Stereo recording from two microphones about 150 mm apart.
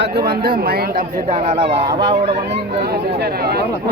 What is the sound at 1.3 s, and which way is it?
Speech, 55° right (ahead or behind).